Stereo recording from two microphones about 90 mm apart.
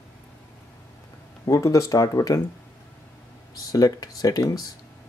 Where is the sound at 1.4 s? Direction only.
35° left (ahead or behind).